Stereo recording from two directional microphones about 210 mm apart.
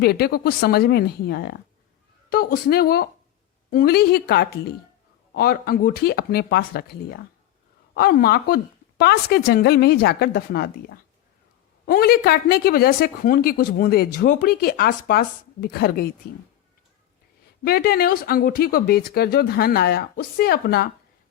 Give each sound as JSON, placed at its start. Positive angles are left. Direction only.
{"t": 0.0, "sound": "speech", "side_deg": 50}
{"t": 17.6, "sound": "speech", "side_deg": 45}